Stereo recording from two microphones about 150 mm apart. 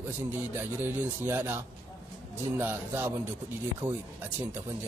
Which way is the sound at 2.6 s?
15° right (ahead or behind).